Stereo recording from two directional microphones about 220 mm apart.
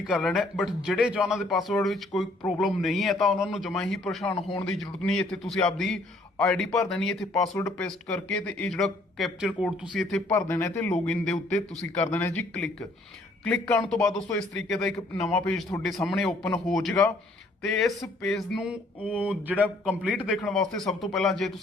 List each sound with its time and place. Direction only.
0.1 s speech: centre (ahead or behind)
4.4 s speech: 25° left (ahead or behind)
4.8 s speech: 5° left (ahead or behind)
13.9 s speech: centre (ahead or behind)